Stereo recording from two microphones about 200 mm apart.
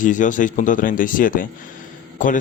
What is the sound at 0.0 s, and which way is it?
Speech, 40° left (ahead or behind).